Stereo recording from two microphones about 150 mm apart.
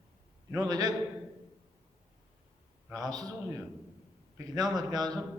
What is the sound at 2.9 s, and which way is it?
A man's voice, 25° right (ahead or behind).